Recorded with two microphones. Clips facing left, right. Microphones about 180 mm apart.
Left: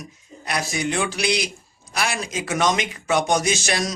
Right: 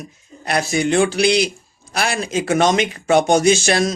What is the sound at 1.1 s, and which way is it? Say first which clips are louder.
Speech: right 7 dB; 30° right (ahead or behind).